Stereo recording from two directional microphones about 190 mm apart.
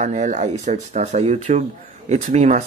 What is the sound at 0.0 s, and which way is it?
Speech, 40° right (ahead or behind).